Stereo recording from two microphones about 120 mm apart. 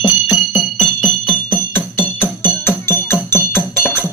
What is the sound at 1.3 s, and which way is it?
Music, 15° left (ahead or behind).